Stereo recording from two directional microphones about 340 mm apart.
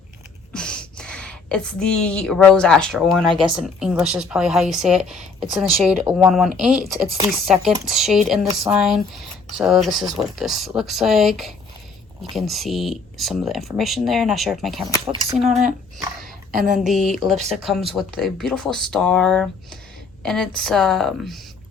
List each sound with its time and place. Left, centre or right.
0.5 s speech: centre
16.5 s a woman's voice: right
16.7 s speech: centre